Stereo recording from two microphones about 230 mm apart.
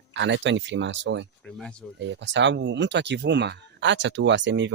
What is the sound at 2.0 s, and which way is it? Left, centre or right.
Speech, right.